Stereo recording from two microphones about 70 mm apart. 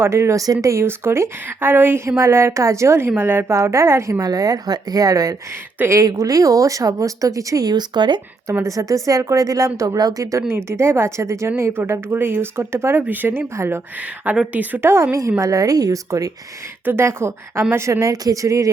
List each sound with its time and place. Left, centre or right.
0.0 s speech: right
0.4 s a woman's voice: right
3.5 s speech: right
4.2 s speech: right
8.6 s speech: right
10.0 s speech: right
10.5 s a woman's voice: right
13.6 s a woman's voice: right
14.5 s a woman's voice: right
16.8 s a woman's voice: right
18.0 s speech: right